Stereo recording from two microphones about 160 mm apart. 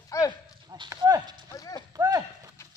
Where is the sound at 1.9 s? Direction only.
20° right (ahead or behind).